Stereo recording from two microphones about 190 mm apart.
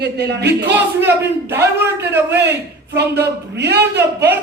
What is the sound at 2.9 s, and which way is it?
Speech, 60° right (ahead or behind).